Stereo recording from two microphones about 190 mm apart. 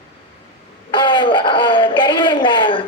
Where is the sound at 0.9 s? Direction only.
25° left (ahead or behind).